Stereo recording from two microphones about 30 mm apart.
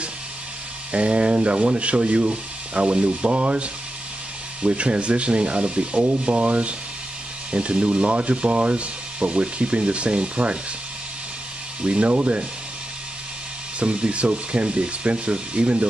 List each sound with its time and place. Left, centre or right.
0.9 s speech: right
11.8 s speech: right
13.7 s speech: right